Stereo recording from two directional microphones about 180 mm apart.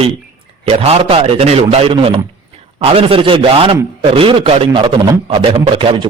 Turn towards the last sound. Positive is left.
turn(degrees=-30)  # may be behind; listen again after turning